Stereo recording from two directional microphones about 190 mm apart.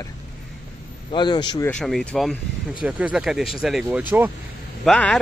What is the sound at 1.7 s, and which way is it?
Speech, 5° left (ahead or behind).